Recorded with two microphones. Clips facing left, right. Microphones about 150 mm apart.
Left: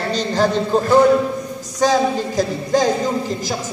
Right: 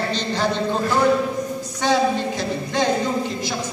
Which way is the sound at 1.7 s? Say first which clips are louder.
Left 3 dB; 40° left (ahead or behind).